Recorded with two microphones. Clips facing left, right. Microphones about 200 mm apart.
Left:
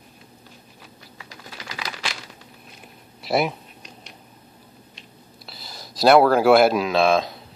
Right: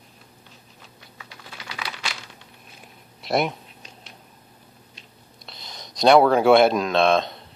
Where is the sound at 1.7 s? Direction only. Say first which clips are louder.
Left 1 dB; 40° left (ahead or behind).